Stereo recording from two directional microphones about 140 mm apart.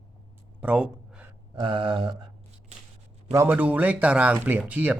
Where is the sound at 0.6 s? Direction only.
10° right (ahead or behind).